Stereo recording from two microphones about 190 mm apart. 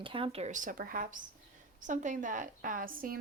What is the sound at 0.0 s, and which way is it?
Speech, 30° right (ahead or behind).